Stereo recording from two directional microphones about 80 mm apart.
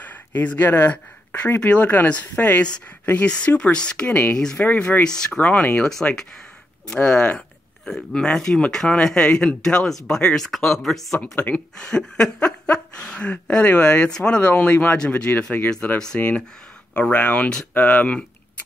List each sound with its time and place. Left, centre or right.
0.0 s speech: left
4.6 s speech: centre
5.4 s speech: left
7.1 s speech: centre